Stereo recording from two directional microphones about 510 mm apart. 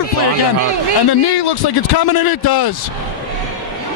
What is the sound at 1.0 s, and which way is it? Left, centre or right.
A man's voice, left.